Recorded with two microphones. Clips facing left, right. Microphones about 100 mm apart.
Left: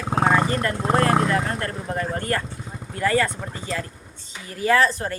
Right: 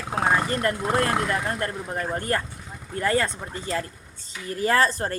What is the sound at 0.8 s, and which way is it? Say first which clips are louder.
Speech: left 7 dB; 30° left (ahead or behind).